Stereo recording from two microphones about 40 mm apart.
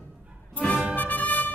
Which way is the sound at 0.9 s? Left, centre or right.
Left.